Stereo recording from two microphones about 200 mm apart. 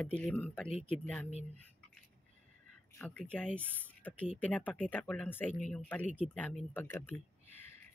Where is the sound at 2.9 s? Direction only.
5° left (ahead or behind).